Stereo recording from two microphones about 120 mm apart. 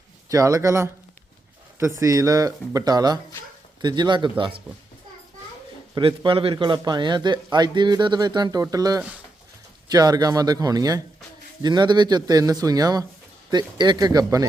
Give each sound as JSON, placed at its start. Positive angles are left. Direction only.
{"t": 0.3, "sound": "a man's voice", "side_deg": -30}
{"t": 6.0, "sound": "a man's voice", "side_deg": -45}
{"t": 9.0, "sound": "speech", "side_deg": -10}
{"t": 9.9, "sound": "a man's voice", "side_deg": -35}